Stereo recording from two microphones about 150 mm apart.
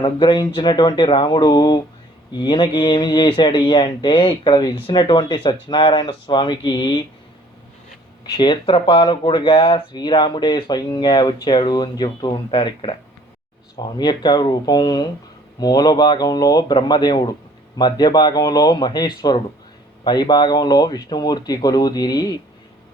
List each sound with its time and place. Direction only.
0.0 s speech: 35° left (ahead or behind)
8.2 s speech: 30° left (ahead or behind)